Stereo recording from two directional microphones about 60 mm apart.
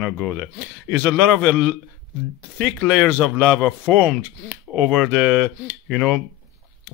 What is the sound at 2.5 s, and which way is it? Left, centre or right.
Speech, centre.